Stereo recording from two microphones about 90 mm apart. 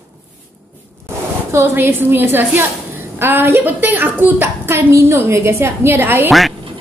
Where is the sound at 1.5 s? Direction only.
25° right (ahead or behind).